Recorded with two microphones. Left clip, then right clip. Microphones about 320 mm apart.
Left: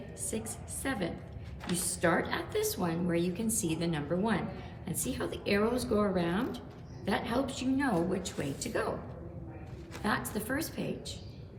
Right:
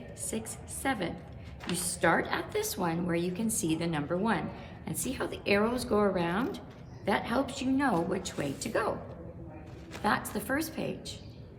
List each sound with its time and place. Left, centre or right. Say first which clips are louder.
0.3 s a woman's voice: right 1 dB; centre
10.0 s a woman's voice: right 3 dB; centre